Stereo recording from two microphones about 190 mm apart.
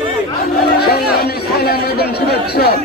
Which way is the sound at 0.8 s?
55° left (ahead or behind).